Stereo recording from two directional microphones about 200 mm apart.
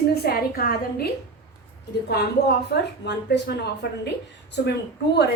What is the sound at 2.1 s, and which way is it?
A woman's voice, 55° left (ahead or behind).